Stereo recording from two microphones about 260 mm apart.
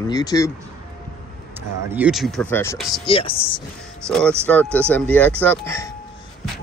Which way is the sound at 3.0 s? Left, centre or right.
Left.